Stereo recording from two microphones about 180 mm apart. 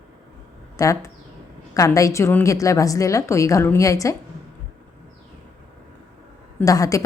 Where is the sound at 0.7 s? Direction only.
15° left (ahead or behind).